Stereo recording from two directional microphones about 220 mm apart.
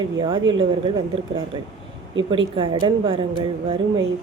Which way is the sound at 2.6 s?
25° right (ahead or behind).